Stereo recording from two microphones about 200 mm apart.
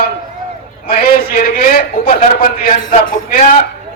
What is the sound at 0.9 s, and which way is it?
A man's voice, 45° left (ahead or behind).